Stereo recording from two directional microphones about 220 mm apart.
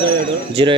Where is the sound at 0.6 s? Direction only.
25° right (ahead or behind).